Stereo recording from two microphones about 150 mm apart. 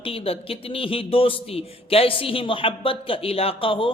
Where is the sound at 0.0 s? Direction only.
40° left (ahead or behind).